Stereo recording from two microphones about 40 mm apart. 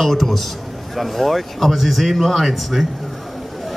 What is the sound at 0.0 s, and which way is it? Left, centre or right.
A man's voice, centre.